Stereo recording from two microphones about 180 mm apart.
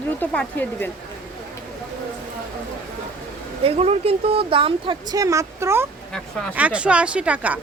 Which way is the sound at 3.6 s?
35° right (ahead or behind).